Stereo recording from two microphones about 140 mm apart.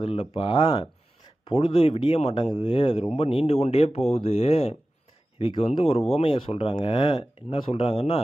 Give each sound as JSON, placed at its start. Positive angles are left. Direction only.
{"t": 0.0, "sound": "speech", "side_deg": 40}